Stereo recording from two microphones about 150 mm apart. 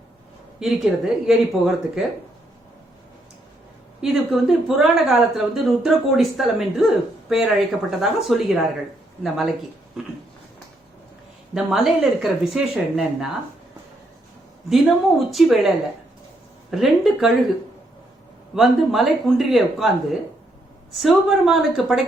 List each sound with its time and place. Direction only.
0.6 s a woman's voice: centre (ahead or behind)
4.0 s a woman's voice: centre (ahead or behind)
11.5 s a woman's voice: 5° right (ahead or behind)
14.7 s a woman's voice: centre (ahead or behind)
16.7 s a woman's voice: centre (ahead or behind)
18.5 s a woman's voice: centre (ahead or behind)
20.9 s a woman's voice: centre (ahead or behind)